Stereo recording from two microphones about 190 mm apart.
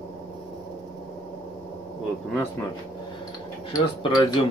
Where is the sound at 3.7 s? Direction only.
25° left (ahead or behind).